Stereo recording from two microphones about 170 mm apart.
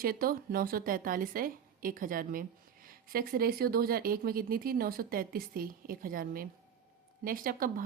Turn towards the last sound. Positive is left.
turn(degrees=-55)  # may be behind; listen again after turning